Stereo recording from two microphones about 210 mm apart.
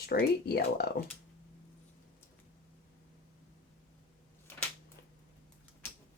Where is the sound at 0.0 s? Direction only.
45° left (ahead or behind).